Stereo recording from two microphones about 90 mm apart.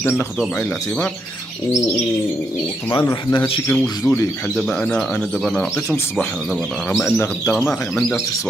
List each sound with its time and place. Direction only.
0.6 s speech: 15° left (ahead or behind)
3.3 s speech: 75° left (ahead or behind)
3.7 s speech: 10° left (ahead or behind)
5.4 s speech: 5° left (ahead or behind)